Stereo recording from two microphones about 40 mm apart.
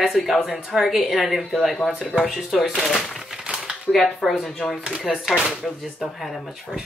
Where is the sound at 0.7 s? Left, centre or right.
Centre.